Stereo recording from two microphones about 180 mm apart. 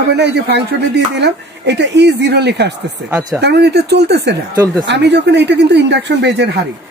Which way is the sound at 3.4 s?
70° right (ahead or behind).